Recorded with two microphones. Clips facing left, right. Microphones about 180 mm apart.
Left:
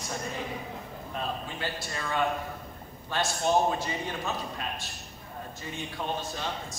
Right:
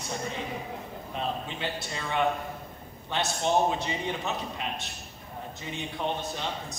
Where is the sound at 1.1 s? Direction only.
20° right (ahead or behind).